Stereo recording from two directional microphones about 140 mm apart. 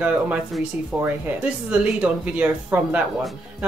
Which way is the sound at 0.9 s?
10° right (ahead or behind).